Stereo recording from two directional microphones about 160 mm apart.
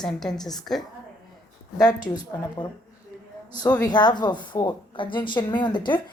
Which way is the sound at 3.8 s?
30° left (ahead or behind).